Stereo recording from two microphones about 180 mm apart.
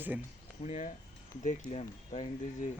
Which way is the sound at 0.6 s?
45° left (ahead or behind).